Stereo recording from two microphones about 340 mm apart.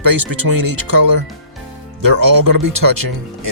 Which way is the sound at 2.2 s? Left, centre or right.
Right.